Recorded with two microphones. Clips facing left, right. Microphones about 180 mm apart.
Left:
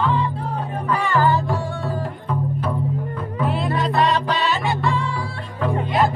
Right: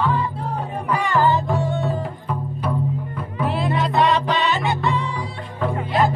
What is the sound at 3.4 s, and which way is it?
Music, centre (ahead or behind).